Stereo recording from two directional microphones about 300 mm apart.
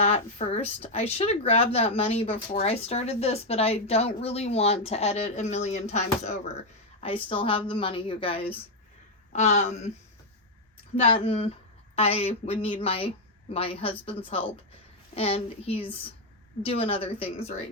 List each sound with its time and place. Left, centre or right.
0.0 s a woman's voice: centre
11.0 s speech: centre